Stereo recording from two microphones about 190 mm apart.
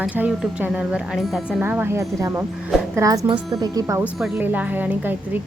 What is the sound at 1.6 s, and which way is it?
Speech, 10° right (ahead or behind).